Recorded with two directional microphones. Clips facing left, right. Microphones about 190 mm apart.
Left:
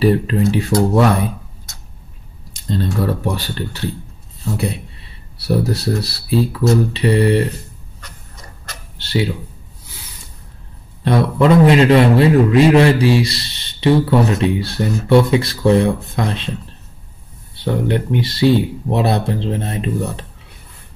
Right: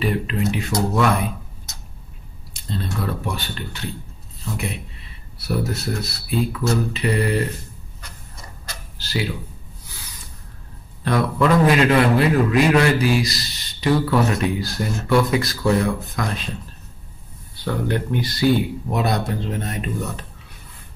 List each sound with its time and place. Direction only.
0.0 s speech: 35° left (ahead or behind)
3.0 s speech: 40° left (ahead or behind)
5.5 s speech: 35° left (ahead or behind)
9.0 s computer keyboard: 30° left (ahead or behind)
11.1 s a man's voice: 25° left (ahead or behind)
17.6 s a man's voice: 25° left (ahead or behind)